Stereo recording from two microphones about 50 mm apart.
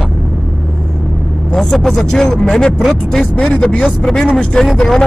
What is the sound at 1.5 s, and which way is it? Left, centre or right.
Speech, centre.